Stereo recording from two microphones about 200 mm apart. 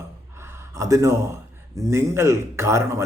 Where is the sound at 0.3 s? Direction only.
10° right (ahead or behind).